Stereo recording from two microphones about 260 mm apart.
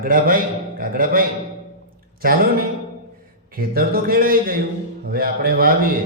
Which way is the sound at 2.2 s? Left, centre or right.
Right.